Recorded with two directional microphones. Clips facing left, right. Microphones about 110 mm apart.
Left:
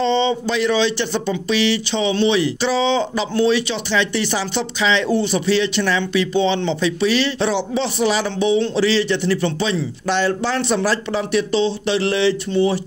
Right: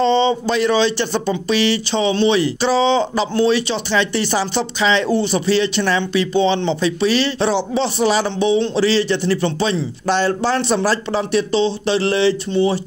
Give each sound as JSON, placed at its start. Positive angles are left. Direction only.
{"t": 0.0, "sound": "speech", "side_deg": -40}